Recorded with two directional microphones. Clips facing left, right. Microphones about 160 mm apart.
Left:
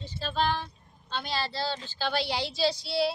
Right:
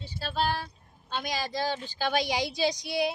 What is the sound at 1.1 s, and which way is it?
A woman's voice, 10° right (ahead or behind).